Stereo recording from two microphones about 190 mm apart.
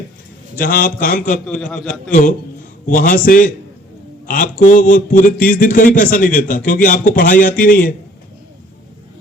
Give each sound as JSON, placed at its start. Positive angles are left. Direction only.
{"t": 0.6, "sound": "speech", "side_deg": 50}
{"t": 1.6, "sound": "a man's voice", "side_deg": 5}
{"t": 2.8, "sound": "speech", "side_deg": 45}